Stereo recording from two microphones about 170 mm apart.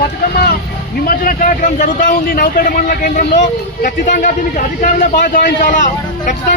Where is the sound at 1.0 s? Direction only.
60° left (ahead or behind).